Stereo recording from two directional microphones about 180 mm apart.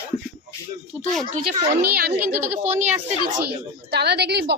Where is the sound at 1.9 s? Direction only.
60° right (ahead or behind).